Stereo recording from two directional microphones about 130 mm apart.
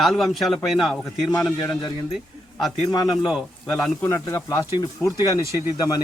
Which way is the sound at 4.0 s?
25° left (ahead or behind).